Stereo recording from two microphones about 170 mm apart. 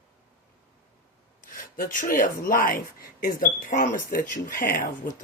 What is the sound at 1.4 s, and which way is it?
Speech, 50° left (ahead or behind).